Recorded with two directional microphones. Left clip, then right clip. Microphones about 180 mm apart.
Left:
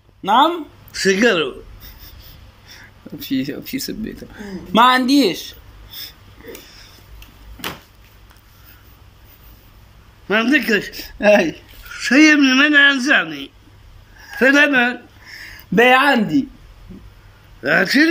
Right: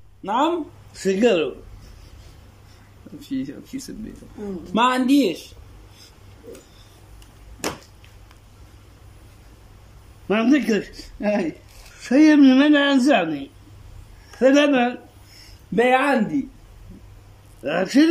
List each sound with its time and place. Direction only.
0.2 s speech: centre (ahead or behind)
0.9 s a man's voice: 20° right (ahead or behind)
3.2 s speech: 5° left (ahead or behind)
10.2 s a man's voice: 15° right (ahead or behind)
10.9 s speech: centre (ahead or behind)
11.9 s a man's voice: 25° right (ahead or behind)
15.2 s a sound: centre (ahead or behind)
17.6 s a man's voice: 15° right (ahead or behind)